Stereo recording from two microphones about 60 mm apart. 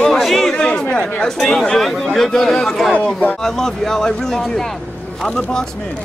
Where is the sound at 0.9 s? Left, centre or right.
Centre.